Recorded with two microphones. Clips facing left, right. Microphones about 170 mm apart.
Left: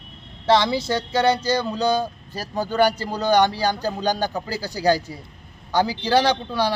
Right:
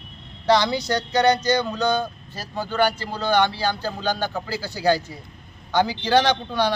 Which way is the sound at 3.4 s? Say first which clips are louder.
Left 2 dB; 40° left (ahead or behind).